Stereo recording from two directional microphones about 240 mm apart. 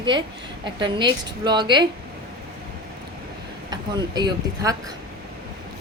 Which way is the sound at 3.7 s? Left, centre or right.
Centre.